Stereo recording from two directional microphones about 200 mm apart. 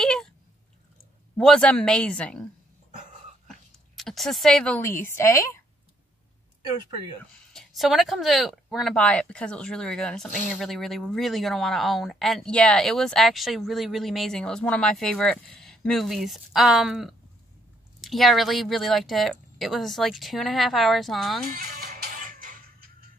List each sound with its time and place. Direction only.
0.0 s a sound: 5° left (ahead or behind)
1.3 s a woman's voice: 5° left (ahead or behind)
7.5 s speech: centre (ahead or behind)
21.5 s music: 45° right (ahead or behind)